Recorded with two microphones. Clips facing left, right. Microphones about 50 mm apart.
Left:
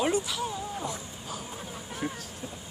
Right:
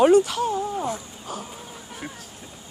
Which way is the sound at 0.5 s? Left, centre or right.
Right.